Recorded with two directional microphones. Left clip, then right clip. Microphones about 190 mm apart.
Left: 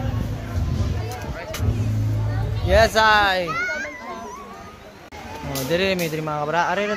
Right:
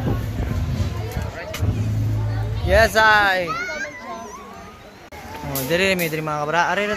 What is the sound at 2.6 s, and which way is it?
Speech, centre (ahead or behind).